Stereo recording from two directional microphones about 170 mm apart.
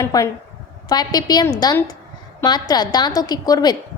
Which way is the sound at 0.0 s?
20° left (ahead or behind).